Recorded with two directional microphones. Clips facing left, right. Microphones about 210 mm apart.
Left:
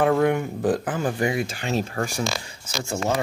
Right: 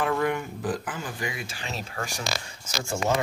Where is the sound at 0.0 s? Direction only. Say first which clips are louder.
Left 6 dB; 55° left (ahead or behind).